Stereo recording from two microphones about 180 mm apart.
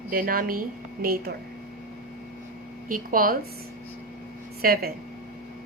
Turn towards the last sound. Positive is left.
turn(degrees=-55)  # may be behind; listen again after turning